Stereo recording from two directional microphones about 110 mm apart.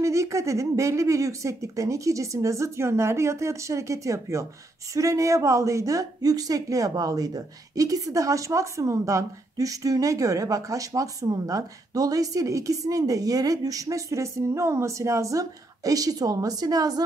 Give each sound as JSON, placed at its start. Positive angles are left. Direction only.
{"t": 0.0, "sound": "speech", "side_deg": -30}